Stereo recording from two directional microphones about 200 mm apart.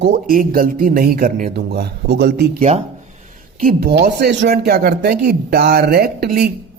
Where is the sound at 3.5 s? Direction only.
45° right (ahead or behind).